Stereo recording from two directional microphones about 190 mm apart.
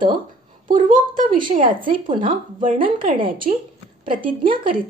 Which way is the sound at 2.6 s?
45° right (ahead or behind).